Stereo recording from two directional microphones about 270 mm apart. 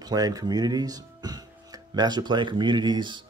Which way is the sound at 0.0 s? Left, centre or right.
Centre.